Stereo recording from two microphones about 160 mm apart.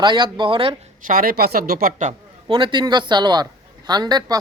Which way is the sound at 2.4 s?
30° right (ahead or behind).